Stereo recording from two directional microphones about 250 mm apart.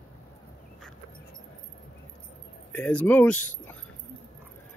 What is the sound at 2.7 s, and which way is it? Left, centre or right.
Speech, centre.